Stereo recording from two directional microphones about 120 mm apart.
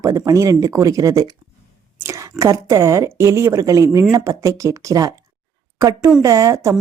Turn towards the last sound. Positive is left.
turn(degrees=-30)  # may be behind; listen again after turning